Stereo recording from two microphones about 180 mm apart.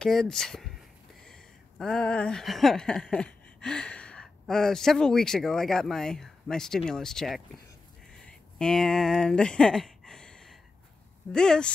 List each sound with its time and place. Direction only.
0.0 s speech: 5° left (ahead or behind)
1.2 s a sound: 5° left (ahead or behind)
11.3 s speech: 5° left (ahead or behind)